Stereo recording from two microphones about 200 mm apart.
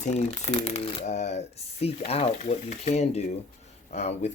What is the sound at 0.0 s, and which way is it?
Speech, 35° left (ahead or behind).